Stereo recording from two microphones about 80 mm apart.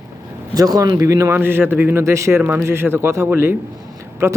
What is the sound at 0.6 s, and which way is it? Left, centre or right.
Speech, right.